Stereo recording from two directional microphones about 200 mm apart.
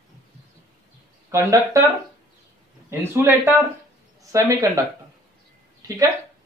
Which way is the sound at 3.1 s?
10° right (ahead or behind).